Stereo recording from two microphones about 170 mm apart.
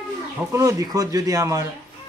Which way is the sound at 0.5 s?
20° right (ahead or behind).